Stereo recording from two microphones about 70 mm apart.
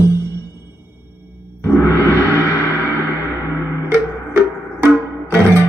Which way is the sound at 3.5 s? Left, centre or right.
Left.